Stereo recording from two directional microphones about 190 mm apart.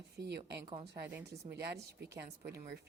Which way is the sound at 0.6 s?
30° right (ahead or behind).